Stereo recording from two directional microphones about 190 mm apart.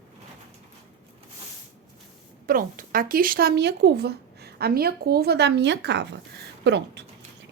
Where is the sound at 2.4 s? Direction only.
50° right (ahead or behind).